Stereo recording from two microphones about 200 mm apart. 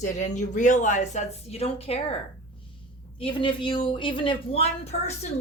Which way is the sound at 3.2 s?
25° left (ahead or behind).